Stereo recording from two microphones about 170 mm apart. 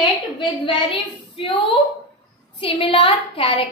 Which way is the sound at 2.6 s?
30° left (ahead or behind).